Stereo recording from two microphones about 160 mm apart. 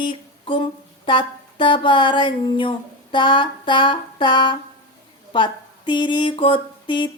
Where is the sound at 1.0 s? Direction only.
30° left (ahead or behind).